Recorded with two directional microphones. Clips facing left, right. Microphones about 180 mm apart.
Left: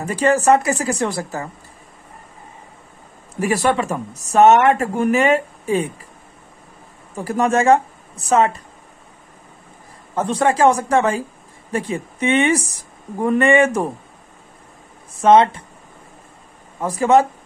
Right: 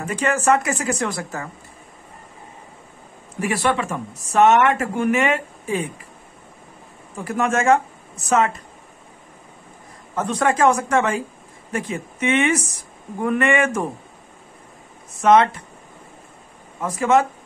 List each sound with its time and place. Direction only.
0.0 s speech: 35° left (ahead or behind)
3.3 s speech: 40° left (ahead or behind)
7.2 s a woman's voice: 35° left (ahead or behind)
10.1 s speech: 30° left (ahead or behind)
15.1 s speech: 30° left (ahead or behind)
16.8 s speech: 35° left (ahead or behind)